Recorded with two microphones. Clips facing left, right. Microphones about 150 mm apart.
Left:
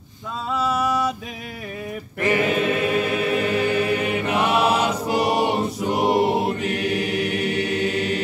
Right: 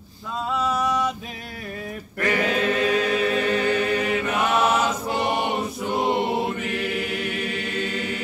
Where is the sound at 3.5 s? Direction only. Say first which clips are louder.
Left 1 dB; 10° left (ahead or behind).